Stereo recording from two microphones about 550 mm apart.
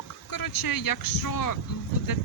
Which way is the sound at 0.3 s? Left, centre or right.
Left.